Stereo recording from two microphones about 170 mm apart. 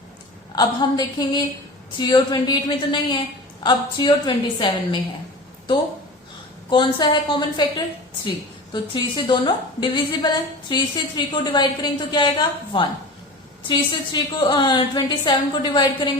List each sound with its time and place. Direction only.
0.5 s a woman's voice: 25° left (ahead or behind)
6.7 s a woman's voice: 30° left (ahead or behind)
8.7 s a woman's voice: 25° left (ahead or behind)